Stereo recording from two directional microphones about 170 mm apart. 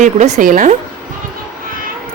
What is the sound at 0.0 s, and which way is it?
Speech, 45° right (ahead or behind).